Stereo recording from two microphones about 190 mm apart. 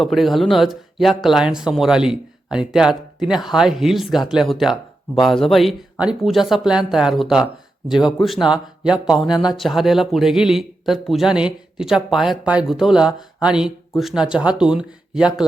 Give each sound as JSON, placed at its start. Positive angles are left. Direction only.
{"t": 0.0, "sound": "speech", "side_deg": 0}